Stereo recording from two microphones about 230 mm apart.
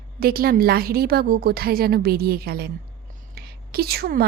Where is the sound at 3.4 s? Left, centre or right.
Right.